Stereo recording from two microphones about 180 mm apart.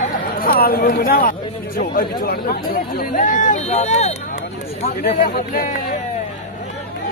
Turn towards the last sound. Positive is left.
turn(degrees=50)  # may be behind; listen again after turning